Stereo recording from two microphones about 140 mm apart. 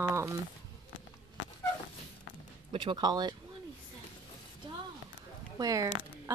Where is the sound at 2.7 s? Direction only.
35° right (ahead or behind).